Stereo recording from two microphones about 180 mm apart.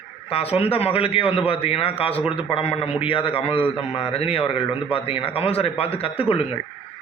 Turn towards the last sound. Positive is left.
turn(degrees=30)  # may be behind; listen again after turning